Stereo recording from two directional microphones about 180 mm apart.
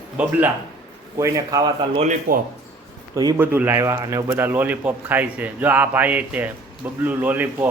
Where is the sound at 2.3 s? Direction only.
50° right (ahead or behind).